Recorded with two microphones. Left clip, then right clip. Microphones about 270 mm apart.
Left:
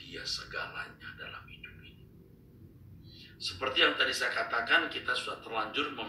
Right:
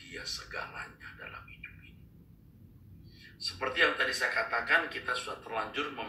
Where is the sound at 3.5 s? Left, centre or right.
Centre.